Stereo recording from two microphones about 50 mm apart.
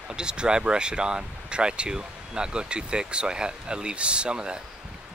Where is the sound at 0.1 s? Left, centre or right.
Centre.